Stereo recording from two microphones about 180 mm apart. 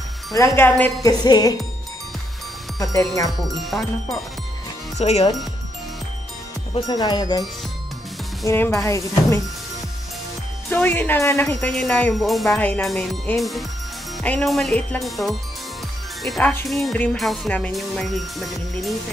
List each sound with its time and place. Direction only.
0.6 s speech: 10° left (ahead or behind)
1.0 s speech: 20° left (ahead or behind)
2.8 s speech: 20° left (ahead or behind)
3.7 s speech: centre (ahead or behind)
4.9 s speech: 35° left (ahead or behind)
6.7 s speech: 25° left (ahead or behind)
8.5 s speech: 15° left (ahead or behind)
10.7 s speech: 10° left (ahead or behind)
11.4 s speech: 5° left (ahead or behind)